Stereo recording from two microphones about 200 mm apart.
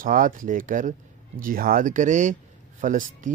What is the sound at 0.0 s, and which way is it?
Speech, 45° right (ahead or behind).